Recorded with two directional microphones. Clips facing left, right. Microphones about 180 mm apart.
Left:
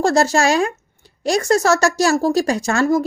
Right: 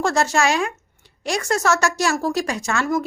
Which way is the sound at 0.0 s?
35° left (ahead or behind).